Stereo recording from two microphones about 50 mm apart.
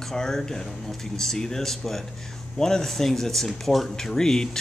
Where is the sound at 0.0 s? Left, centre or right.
Centre.